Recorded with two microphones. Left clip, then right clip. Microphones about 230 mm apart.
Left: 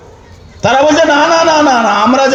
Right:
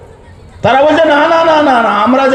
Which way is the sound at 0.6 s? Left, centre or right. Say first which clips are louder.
Right 1 dB; left.